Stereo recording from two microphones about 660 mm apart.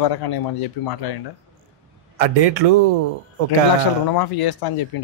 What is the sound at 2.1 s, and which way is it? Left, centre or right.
Speech, right.